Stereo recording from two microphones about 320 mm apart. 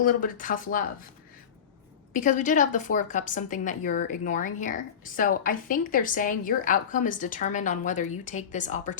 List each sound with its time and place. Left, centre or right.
0.0 s a woman's voice: left
2.1 s a woman's voice: left